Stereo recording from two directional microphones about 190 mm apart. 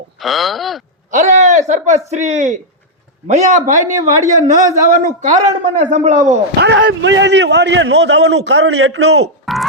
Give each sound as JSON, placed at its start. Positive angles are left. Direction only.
{"t": 0.2, "sound": "speech", "side_deg": 0}
{"t": 1.1, "sound": "a man's voice", "side_deg": -40}
{"t": 6.6, "sound": "a man's voice", "side_deg": -65}
{"t": 9.5, "sound": "speech", "side_deg": 0}